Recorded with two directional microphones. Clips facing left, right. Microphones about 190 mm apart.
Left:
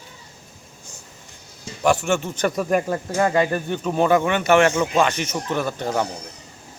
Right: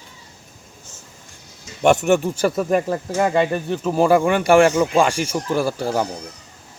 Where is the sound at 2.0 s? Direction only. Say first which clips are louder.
Right 4 dB; 15° right (ahead or behind).